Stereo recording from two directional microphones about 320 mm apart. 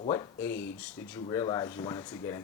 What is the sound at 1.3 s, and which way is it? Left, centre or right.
Speech, centre.